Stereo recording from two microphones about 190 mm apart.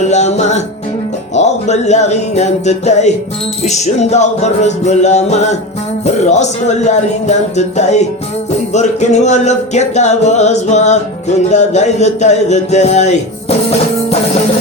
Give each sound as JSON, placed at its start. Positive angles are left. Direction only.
{"t": 0.0, "sound": "music", "side_deg": 40}
{"t": 3.6, "sound": "speech", "side_deg": 35}